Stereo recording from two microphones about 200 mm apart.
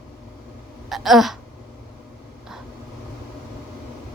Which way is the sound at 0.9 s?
Centre (ahead or behind).